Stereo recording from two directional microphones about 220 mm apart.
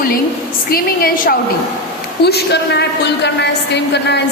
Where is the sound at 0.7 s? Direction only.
40° left (ahead or behind).